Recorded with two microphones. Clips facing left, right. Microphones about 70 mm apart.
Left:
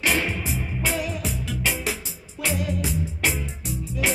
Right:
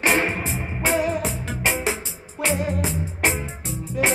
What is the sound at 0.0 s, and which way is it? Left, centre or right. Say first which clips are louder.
Music: right 3 dB; right.